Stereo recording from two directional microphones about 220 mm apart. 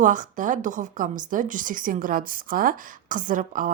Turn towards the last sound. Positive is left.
turn(degrees=-35)  # may be behind; listen again after turning